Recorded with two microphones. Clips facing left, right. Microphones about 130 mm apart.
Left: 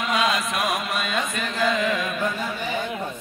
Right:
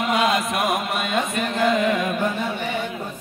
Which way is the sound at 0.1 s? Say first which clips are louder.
Right 2 dB; 55° right (ahead or behind).